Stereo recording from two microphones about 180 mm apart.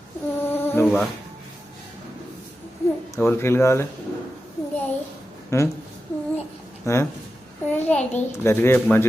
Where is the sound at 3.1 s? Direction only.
10° left (ahead or behind).